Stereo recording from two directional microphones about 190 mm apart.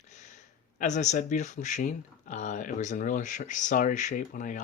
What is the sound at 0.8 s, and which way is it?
Speech, 40° left (ahead or behind).